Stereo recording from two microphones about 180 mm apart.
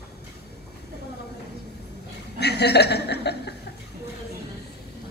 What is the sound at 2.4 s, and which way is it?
Chuckle, 65° left (ahead or behind).